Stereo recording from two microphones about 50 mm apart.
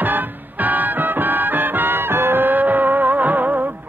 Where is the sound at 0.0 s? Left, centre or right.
Right.